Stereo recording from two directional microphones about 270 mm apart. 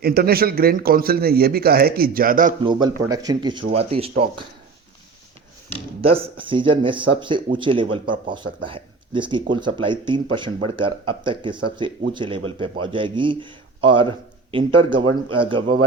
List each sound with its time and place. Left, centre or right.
0.0 s speech: right
2.6 s speech: centre
6.0 s speech: right